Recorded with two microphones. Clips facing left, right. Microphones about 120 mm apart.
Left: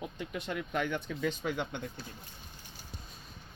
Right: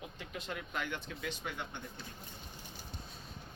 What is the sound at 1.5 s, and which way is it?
Speech, 90° left.